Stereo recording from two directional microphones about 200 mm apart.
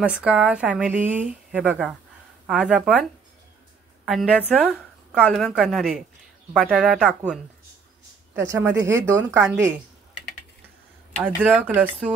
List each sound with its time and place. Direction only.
0.0 s a woman's voice: 5° right (ahead or behind)
8.4 s speech: 10° right (ahead or behind)
11.5 s speech: 10° right (ahead or behind)